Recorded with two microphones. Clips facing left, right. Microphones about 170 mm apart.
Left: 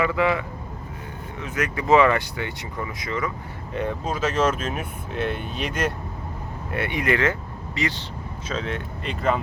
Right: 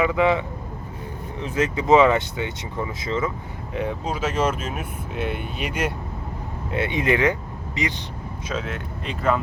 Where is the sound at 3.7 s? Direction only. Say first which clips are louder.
Even; 10° right (ahead or behind).